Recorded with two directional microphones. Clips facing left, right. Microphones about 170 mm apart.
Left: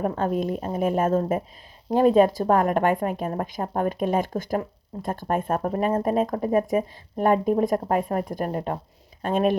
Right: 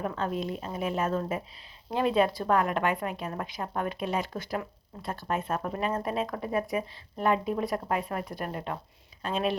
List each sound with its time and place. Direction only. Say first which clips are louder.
0.0 s speech: left 7 dB; 45° left (ahead or behind)